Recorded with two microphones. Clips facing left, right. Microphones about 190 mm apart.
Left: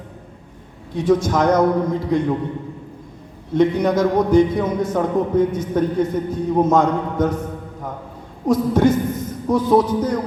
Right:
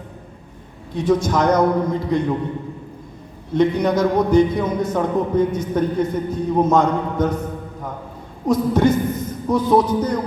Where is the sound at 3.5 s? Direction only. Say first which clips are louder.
Left 1 dB; 50° left (ahead or behind).